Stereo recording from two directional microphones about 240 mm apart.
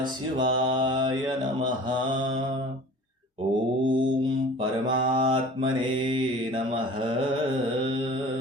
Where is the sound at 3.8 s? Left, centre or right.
Centre.